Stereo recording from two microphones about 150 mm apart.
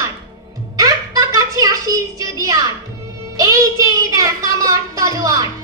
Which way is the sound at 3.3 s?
25° right (ahead or behind).